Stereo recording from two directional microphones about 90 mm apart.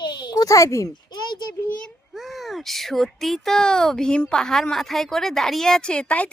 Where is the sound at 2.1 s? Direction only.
Centre (ahead or behind).